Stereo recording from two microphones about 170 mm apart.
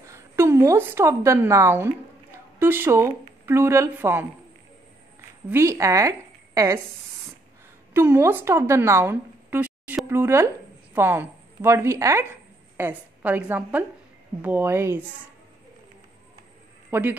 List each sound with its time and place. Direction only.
0.0 s a woman's voice: 15° right (ahead or behind)
5.5 s a woman's voice: 15° right (ahead or behind)
7.9 s a woman's voice: 15° right (ahead or behind)
16.9 s speech: 10° right (ahead or behind)